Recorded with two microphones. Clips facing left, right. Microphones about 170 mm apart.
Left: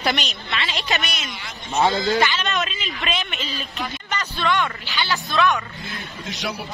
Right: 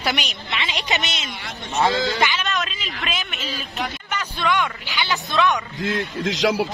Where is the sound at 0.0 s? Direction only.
10° right (ahead or behind).